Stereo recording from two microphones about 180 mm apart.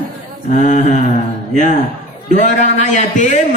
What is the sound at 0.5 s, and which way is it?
Speech, 40° left (ahead or behind).